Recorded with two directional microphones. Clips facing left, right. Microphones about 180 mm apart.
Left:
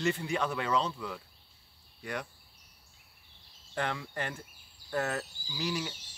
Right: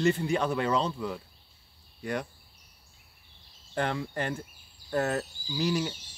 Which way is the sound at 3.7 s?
40° right (ahead or behind).